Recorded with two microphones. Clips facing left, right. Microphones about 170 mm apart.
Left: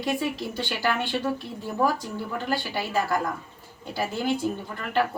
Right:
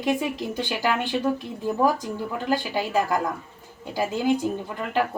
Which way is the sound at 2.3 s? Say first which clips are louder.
Right 3 dB; 15° right (ahead or behind).